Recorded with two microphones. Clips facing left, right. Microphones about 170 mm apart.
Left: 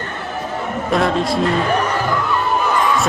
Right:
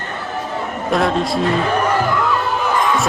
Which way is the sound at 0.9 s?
Centre (ahead or behind).